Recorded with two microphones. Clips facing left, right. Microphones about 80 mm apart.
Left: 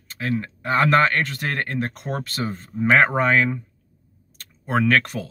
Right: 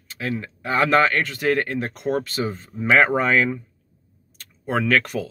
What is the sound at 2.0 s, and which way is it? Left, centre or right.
Speech, left.